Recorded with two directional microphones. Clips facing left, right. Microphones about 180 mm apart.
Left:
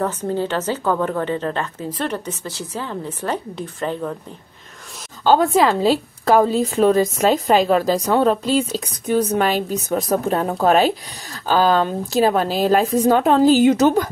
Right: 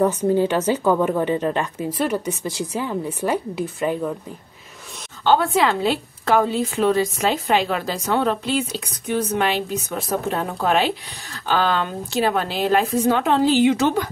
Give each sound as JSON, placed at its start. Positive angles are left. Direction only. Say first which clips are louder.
{"t": 0.0, "sound": "a woman's voice", "louder": "right 4 dB", "side_deg": -15}
{"t": 5.2, "sound": "a woman's voice", "louder": "left 3 dB", "side_deg": 40}